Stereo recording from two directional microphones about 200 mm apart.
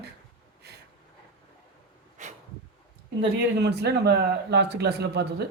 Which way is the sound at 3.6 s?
55° right (ahead or behind).